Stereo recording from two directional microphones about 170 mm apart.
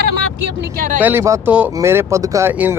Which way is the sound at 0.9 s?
10° right (ahead or behind).